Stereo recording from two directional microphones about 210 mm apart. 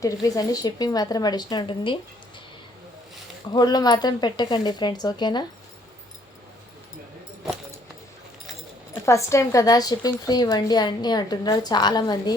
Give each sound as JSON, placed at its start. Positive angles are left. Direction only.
{"t": 0.0, "sound": "a woman's voice", "side_deg": 15}
{"t": 3.5, "sound": "a woman's voice", "side_deg": 20}
{"t": 9.0, "sound": "a woman's voice", "side_deg": 15}